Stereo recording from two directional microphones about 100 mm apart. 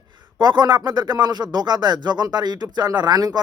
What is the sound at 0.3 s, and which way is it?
Speech, 45° right (ahead or behind).